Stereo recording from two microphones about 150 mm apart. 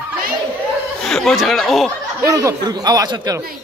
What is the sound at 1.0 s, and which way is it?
Speech, centre (ahead or behind).